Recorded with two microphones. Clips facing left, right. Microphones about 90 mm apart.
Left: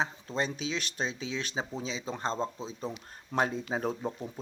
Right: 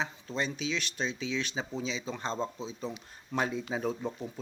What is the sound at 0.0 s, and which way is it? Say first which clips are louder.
Speech: left 2 dB; 35° left (ahead or behind).